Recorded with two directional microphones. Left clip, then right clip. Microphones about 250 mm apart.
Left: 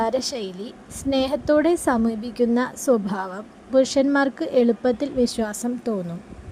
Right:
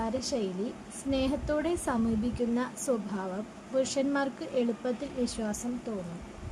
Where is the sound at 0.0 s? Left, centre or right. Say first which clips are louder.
Left 8 dB; left.